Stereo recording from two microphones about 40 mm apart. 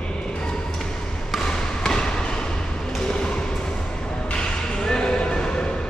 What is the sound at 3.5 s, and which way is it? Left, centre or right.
Music, left.